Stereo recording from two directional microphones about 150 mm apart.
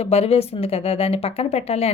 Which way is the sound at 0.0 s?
45° left (ahead or behind).